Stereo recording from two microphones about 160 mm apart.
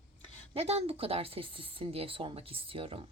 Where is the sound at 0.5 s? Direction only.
40° right (ahead or behind).